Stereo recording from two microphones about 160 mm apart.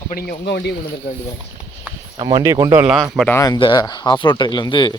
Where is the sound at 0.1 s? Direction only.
65° left (ahead or behind); by 0.8 s 90° left.